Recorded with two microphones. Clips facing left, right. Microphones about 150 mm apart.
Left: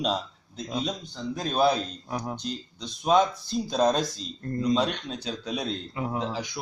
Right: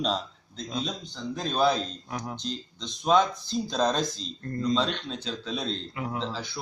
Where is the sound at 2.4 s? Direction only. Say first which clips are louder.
Left 1 dB; 10° left (ahead or behind).